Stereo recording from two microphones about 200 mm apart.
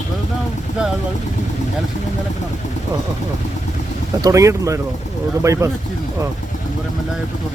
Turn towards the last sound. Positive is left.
turn(degrees=-15)  # may be behind; listen again after turning